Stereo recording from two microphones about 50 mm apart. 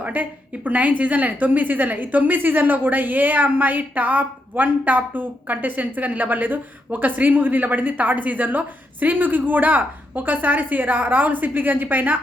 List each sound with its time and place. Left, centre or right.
0.0 s a woman's voice: right